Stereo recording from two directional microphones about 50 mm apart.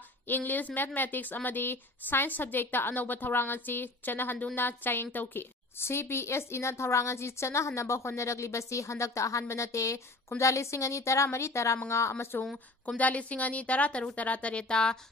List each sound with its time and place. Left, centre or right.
0.3 s a woman's voice: left
11.9 s speech: left
12.8 s a woman's voice: left